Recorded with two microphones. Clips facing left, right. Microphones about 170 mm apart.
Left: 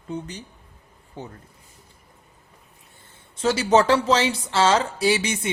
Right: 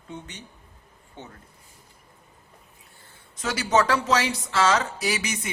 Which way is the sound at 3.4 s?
30° left (ahead or behind).